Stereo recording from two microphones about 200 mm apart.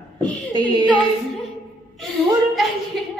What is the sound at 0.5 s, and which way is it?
Speech, 25° right (ahead or behind).